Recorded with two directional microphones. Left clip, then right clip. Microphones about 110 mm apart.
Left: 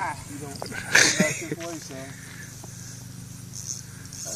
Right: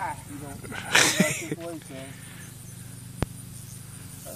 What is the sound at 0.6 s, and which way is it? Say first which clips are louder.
Speech: left 2 dB; 20° right (ahead or behind).